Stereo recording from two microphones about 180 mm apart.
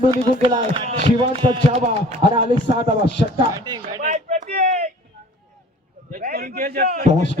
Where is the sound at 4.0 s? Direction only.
40° right (ahead or behind).